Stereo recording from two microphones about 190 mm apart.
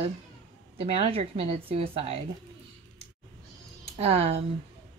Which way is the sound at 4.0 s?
30° right (ahead or behind).